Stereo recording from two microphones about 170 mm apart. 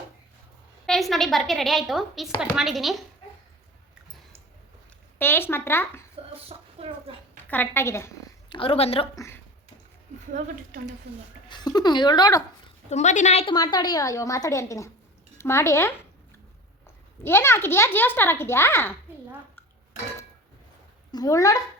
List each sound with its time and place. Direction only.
0.9 s a woman's voice: centre (ahead or behind)
5.2 s a child's voice: 10° left (ahead or behind)
6.3 s a sound: 35° right (ahead or behind)
7.5 s a child's voice: 10° left (ahead or behind)
8.4 s a woman's voice: 30° left (ahead or behind)
9.1 s a child's voice: 15° left (ahead or behind)
10.3 s a woman's voice: 50° right (ahead or behind)
11.4 s a woman's voice: 25° left (ahead or behind)
12.9 s a woman's voice: 45° left (ahead or behind)
13.4 s a woman's voice: 25° left (ahead or behind)
17.2 s a child's voice: 15° left (ahead or behind)
21.1 s a woman's voice: 20° left (ahead or behind)